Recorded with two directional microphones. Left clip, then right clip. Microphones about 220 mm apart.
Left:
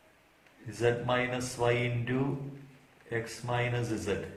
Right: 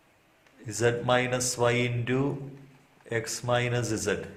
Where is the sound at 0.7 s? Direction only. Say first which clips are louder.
Right 4 dB; 45° right (ahead or behind).